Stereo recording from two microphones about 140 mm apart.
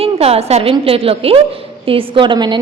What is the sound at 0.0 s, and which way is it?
A woman's voice, 45° right (ahead or behind).